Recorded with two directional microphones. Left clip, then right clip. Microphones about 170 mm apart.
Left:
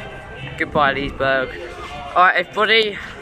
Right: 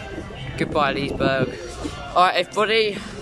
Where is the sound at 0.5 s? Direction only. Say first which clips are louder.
Left 4 dB; 10° right (ahead or behind).